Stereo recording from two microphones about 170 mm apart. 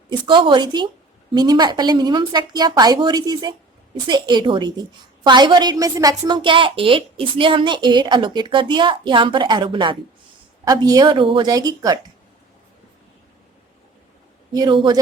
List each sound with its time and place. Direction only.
0.1 s a woman's voice: 30° right (ahead or behind)
14.5 s a woman's voice: 25° right (ahead or behind)